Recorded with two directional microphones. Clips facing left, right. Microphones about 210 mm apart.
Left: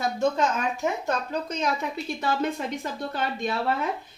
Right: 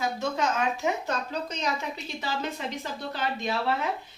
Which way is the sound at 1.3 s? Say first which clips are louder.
Left 3 dB; 50° left (ahead or behind).